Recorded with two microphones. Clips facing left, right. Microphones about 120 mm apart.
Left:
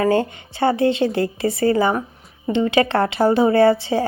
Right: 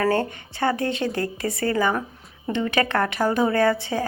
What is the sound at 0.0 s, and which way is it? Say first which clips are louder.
A woman's voice: left 4 dB; 20° left (ahead or behind).